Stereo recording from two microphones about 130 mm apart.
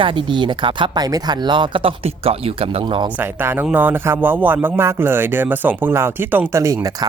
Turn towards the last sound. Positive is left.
turn(degrees=-25)  # may be behind; listen again after turning